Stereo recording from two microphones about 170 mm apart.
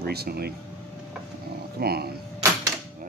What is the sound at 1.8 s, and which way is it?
Mechanisms, 65° right (ahead or behind).